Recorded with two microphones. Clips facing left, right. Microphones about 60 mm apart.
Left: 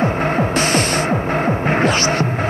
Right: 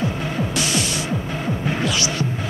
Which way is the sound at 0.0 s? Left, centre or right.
Left.